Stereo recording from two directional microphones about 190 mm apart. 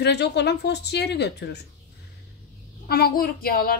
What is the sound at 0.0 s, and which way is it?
A woman's voice, 60° left (ahead or behind).